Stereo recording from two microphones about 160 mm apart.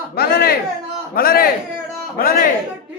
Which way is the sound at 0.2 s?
75° left (ahead or behind).